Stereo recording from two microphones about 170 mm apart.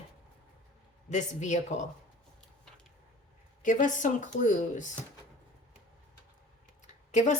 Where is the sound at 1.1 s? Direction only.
45° left (ahead or behind).